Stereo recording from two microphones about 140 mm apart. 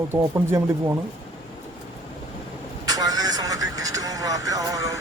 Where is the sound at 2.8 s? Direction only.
25° right (ahead or behind).